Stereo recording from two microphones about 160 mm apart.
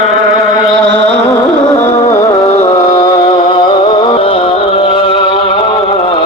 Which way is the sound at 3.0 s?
25° left (ahead or behind).